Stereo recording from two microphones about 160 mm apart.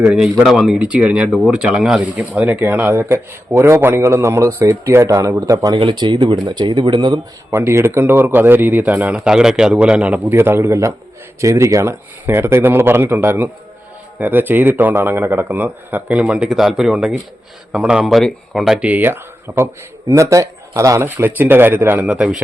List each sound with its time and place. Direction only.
0.0 s speech: 10° right (ahead or behind); by 7.2 s 30° right (ahead or behind)
7.5 s speech: 15° right (ahead or behind)